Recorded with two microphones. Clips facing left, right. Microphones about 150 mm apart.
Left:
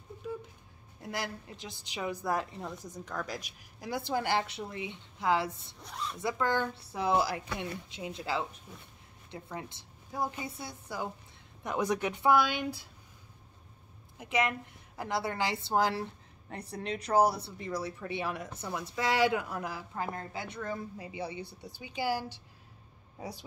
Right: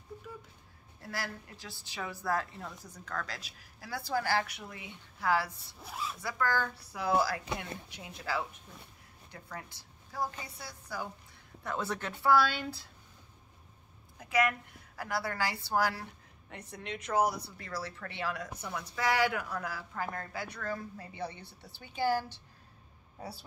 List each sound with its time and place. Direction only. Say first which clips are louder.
1.0 s a woman's voice: left 3 dB; 20° left (ahead or behind)
5.8 s speech: right 1 dB; 5° right (ahead or behind)
6.1 s a woman's voice: left 2 dB; 20° left (ahead or behind)
14.1 s a woman's voice: right 1 dB; 20° left (ahead or behind)
16.4 s a woman's voice: left 5 dB; 35° left (ahead or behind)
17.6 s a woman's voice: left 4 dB; 20° left (ahead or behind)